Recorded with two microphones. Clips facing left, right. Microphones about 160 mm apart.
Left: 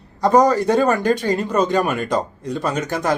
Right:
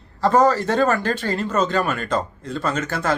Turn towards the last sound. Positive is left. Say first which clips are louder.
# left 2 dB
turn(degrees=15)  # may be behind; listen again after turning